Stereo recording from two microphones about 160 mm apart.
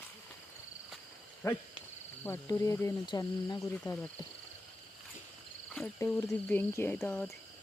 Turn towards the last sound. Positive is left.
turn(degrees=5)  # may be behind; listen again after turning